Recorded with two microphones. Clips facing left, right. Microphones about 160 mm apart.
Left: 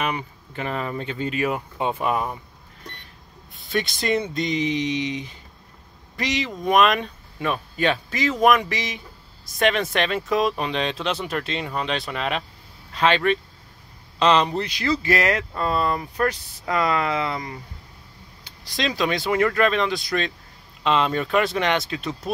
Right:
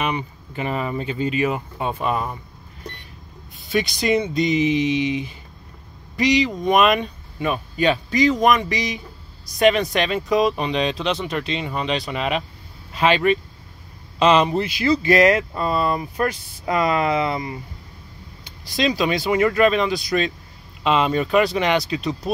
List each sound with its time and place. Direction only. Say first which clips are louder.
0.0 s speech: right 2 dB; 5° right (ahead or behind)
1.8 s speech: left 1 dB; 10° left (ahead or behind)
3.5 s speech: right 3 dB; centre (ahead or behind)
15.0 s speech: right 8 dB; 20° right (ahead or behind)
18.8 s speech: right 3 dB; 5° right (ahead or behind)